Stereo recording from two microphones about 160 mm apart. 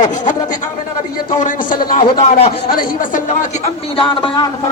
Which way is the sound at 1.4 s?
60° left (ahead or behind).